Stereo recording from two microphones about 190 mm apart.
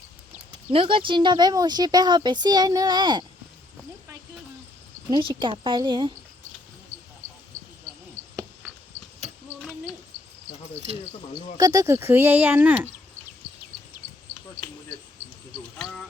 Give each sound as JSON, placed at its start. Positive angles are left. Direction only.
{"t": 0.7, "sound": "speech", "side_deg": -30}
{"t": 5.1, "sound": "speech", "side_deg": -25}
{"t": 11.5, "sound": "speech", "side_deg": -20}